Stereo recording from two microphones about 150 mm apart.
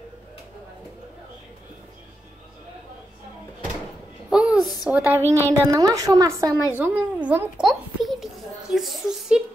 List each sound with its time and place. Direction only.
4.3 s a sound: 5° right (ahead or behind)
5.5 s a woman's voice: 25° right (ahead or behind)
6.8 s speech: 10° right (ahead or behind)